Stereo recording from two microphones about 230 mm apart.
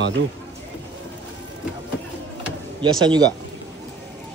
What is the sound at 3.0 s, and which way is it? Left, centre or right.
Speech, centre.